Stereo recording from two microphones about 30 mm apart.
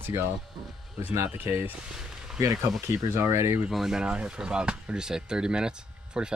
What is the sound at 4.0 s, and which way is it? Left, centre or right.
Speech, right.